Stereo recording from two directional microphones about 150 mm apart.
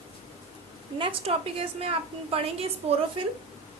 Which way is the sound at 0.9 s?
40° right (ahead or behind).